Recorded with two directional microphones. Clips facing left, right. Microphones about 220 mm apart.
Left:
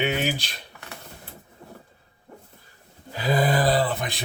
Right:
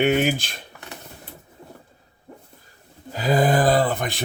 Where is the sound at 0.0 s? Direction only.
50° right (ahead or behind).